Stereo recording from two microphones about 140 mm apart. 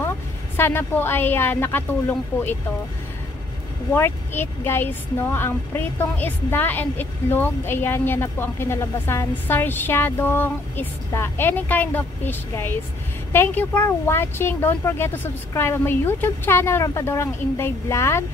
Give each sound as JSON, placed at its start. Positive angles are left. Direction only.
{"t": 0.6, "sound": "speech", "side_deg": 15}
{"t": 3.9, "sound": "speech", "side_deg": 15}